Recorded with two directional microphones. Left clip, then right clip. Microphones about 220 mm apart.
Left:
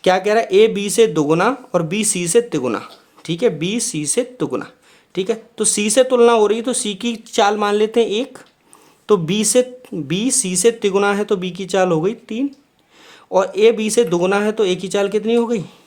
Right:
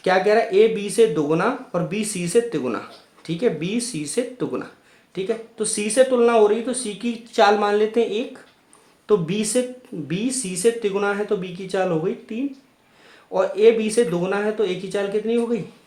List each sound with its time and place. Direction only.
0.0 s speech: 35° left (ahead or behind)